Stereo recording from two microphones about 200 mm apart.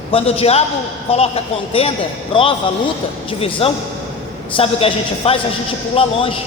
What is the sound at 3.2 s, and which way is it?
A woman's voice, 30° left (ahead or behind).